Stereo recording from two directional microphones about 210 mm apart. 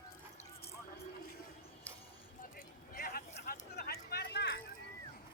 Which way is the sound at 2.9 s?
45° left (ahead or behind).